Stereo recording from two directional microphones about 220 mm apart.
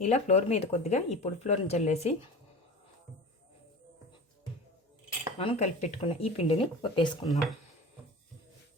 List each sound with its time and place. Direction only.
0.0 s speech: 30° left (ahead or behind)
5.4 s speech: 30° left (ahead or behind)
7.3 s speech: centre (ahead or behind)